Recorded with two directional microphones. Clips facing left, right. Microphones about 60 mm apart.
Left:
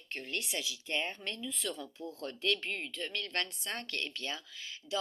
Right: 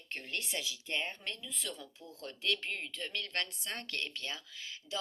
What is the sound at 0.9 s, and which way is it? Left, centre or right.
Speech, centre.